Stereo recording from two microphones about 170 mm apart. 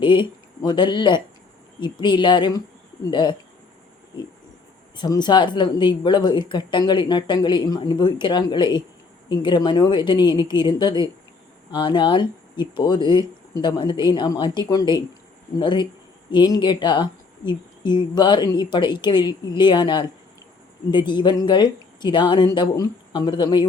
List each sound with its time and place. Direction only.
0.0 s speech: 30° left (ahead or behind)
4.9 s speech: 25° left (ahead or behind)